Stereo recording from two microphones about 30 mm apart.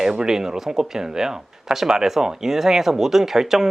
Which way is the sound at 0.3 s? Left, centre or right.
Centre.